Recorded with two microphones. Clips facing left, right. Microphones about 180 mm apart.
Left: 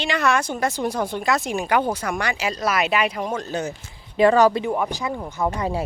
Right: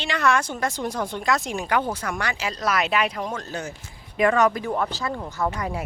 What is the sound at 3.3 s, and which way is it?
Speech, 20° left (ahead or behind).